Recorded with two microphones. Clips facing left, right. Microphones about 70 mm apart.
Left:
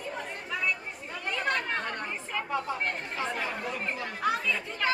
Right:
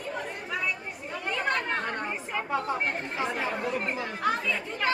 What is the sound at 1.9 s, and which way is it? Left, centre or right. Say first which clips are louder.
Speech: right 3 dB; right.